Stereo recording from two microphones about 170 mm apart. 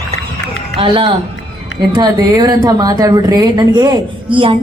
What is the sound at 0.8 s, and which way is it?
Speech, 30° right (ahead or behind).